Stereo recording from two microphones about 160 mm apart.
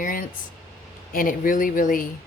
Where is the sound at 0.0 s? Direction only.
60° left (ahead or behind).